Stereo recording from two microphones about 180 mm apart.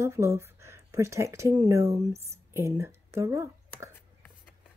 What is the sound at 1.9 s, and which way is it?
Speech, 35° right (ahead or behind).